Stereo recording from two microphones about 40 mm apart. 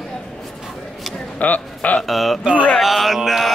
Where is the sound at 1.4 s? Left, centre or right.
Left.